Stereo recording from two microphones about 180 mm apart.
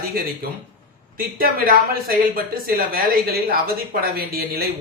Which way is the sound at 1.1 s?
55° right (ahead or behind).